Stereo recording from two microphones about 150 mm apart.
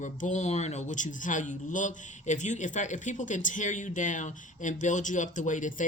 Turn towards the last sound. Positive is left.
turn(degrees=55)  # may be behind; listen again after turning